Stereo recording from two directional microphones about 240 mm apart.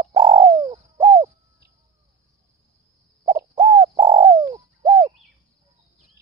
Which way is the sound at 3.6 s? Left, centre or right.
Right.